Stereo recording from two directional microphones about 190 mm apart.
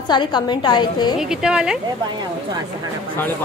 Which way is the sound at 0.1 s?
25° left (ahead or behind).